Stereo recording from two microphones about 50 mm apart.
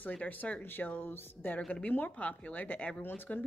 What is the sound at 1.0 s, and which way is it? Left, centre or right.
Speech, left.